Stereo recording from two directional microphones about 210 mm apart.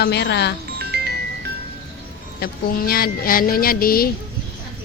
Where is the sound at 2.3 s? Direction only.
45° left (ahead or behind).